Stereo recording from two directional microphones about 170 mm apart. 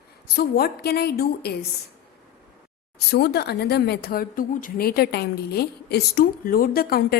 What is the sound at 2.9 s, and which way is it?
A woman's voice, 70° left (ahead or behind).